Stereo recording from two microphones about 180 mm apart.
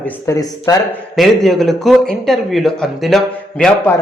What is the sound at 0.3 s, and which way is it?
Speech, 20° left (ahead or behind).